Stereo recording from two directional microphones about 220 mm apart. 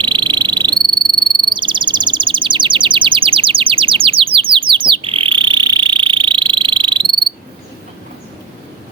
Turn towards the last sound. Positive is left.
turn(degrees=-20)  # may be behind; listen again after turning